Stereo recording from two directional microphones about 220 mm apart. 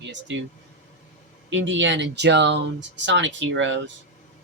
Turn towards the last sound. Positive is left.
turn(degrees=-55)  # may be behind; listen again after turning